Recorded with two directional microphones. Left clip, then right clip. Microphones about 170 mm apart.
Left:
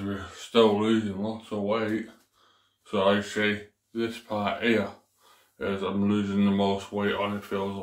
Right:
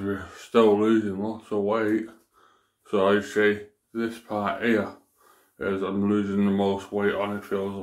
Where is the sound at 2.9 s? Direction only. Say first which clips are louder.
Right 2 dB; 40° right (ahead or behind).